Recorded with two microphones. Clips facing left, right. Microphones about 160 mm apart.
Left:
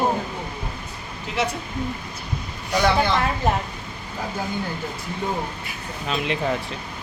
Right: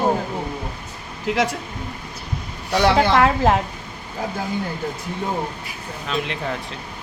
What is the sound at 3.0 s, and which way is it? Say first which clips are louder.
Speech: right 5 dB; 90° right.